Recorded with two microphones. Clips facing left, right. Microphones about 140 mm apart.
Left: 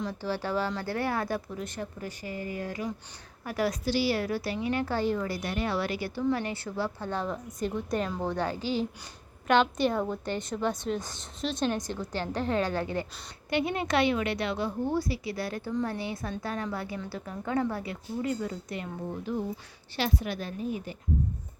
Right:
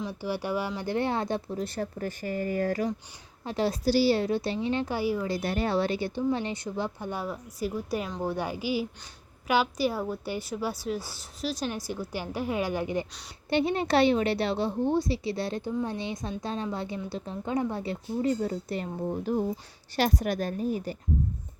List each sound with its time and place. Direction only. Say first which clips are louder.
0.0 s a woman's voice: even; 10° right (ahead or behind)
1.5 s speech: right 4 dB; 35° right (ahead or behind)
2.0 s speech: right 5 dB; 45° right (ahead or behind)
3.4 s speech: right 3 dB; 25° right (ahead or behind)
4.9 s a woman's voice: even; 10° right (ahead or behind)
5.2 s a woman's voice: right 3 dB; 25° right (ahead or behind)
13.5 s speech: right 3 dB; 30° right (ahead or behind)